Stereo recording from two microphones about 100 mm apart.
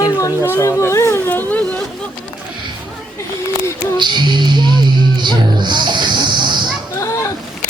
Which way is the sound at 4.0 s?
50° right (ahead or behind).